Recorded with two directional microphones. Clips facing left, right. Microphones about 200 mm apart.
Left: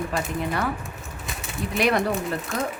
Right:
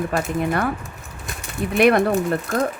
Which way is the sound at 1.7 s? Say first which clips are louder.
Right 7 dB; 55° right (ahead or behind).